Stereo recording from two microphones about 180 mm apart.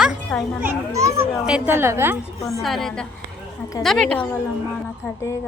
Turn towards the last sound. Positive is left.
turn(degrees=5)  # may be behind; listen again after turning